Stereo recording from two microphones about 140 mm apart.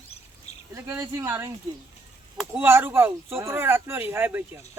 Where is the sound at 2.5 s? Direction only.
15° right (ahead or behind).